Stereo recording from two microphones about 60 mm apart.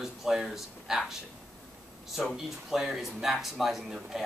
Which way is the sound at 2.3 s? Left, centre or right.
Centre.